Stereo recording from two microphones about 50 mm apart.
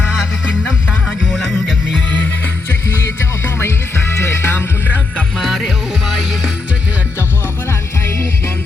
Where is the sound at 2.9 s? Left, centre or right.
Left.